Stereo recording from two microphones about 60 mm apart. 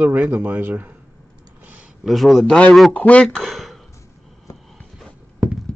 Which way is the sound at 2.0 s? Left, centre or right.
Centre.